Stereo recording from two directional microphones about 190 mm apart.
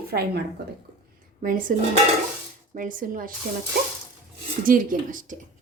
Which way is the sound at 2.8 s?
45° right (ahead or behind).